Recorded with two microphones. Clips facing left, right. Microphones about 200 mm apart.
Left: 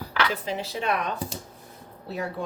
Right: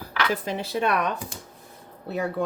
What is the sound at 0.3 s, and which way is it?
Speech, 55° right (ahead or behind).